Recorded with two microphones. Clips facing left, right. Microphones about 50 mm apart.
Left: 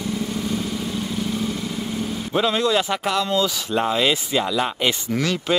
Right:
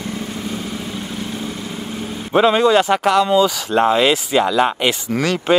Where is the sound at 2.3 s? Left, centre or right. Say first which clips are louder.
Right 7 dB; right.